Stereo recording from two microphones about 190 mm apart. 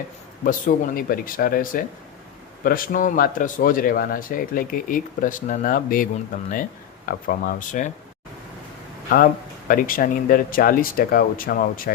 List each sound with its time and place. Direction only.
0.9 s speech: 50° left (ahead or behind)
9.0 s speech: 50° left (ahead or behind)